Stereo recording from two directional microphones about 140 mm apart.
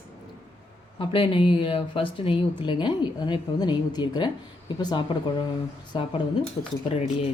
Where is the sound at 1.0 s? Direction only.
40° left (ahead or behind).